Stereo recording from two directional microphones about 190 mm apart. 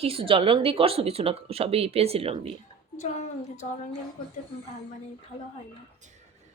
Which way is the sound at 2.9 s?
40° left (ahead or behind).